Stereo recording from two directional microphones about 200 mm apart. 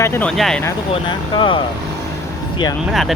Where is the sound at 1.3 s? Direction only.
25° left (ahead or behind).